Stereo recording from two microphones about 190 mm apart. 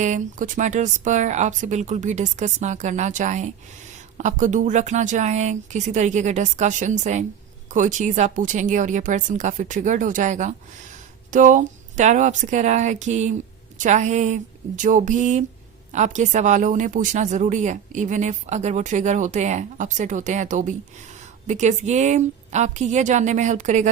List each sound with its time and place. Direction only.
0.0 s speech: 40° right (ahead or behind)